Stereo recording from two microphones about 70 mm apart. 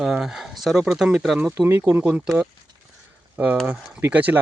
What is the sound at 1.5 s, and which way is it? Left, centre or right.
Speech, right.